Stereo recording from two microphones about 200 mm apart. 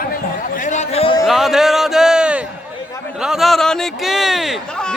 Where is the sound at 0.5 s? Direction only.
40° left (ahead or behind).